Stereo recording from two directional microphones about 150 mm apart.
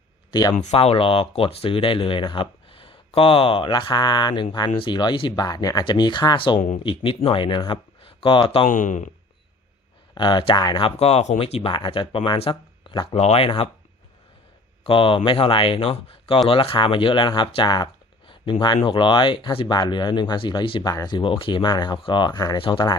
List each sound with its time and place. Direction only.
0.3 s speech: 25° left (ahead or behind)
0.5 s speech: 50° left (ahead or behind); by 6.6 s 35° left (ahead or behind)
6.6 s speech: 55° left (ahead or behind)
6.8 s speech: 35° left (ahead or behind)
8.6 s speech: 55° left (ahead or behind)
10.2 s speech: 30° left (ahead or behind)
13.1 s speech: 45° left (ahead or behind)
14.8 s speech: 35° left (ahead or behind)